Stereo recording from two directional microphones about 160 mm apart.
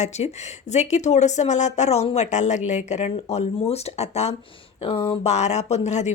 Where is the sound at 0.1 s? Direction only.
45° left (ahead or behind).